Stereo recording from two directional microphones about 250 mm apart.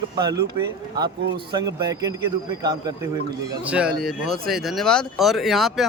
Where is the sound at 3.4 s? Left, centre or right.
Centre.